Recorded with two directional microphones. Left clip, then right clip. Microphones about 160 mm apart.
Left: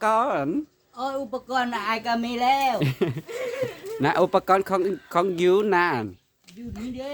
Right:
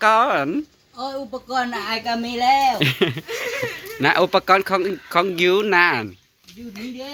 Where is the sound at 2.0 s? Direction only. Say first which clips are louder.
Right 2 dB; 35° left (ahead or behind).